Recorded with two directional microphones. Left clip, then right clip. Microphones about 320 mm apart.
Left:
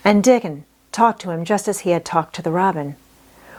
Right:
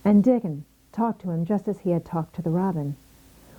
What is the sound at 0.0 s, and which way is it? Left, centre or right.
Speech, centre.